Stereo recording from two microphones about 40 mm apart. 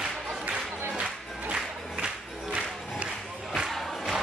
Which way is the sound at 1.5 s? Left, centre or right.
Right.